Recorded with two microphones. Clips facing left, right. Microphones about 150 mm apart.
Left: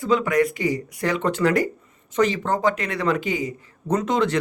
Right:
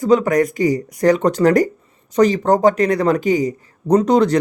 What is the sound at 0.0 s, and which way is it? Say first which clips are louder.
A man's voice: right 5 dB; 40° right (ahead or behind).